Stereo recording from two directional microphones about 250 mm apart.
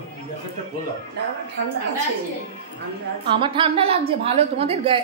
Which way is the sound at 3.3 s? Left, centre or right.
Centre.